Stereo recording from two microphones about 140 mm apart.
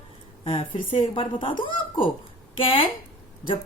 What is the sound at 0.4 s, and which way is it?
Speech, 35° left (ahead or behind).